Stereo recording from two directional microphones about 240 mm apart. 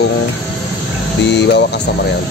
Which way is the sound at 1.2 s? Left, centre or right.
Left.